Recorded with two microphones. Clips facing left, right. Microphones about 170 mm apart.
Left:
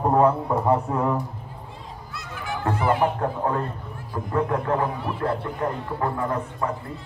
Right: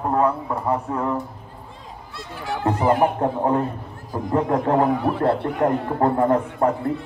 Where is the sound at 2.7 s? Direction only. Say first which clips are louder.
Right 3 dB; 40° right (ahead or behind).